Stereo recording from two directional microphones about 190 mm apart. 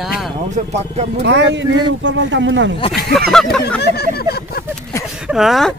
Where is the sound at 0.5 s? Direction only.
35° right (ahead or behind).